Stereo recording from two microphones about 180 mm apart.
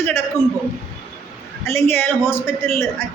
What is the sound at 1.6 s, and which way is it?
A man's voice, 15° left (ahead or behind).